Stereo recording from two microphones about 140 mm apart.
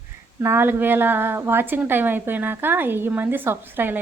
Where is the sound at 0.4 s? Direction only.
15° right (ahead or behind).